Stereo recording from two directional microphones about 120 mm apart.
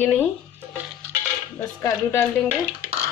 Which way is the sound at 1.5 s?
20° left (ahead or behind).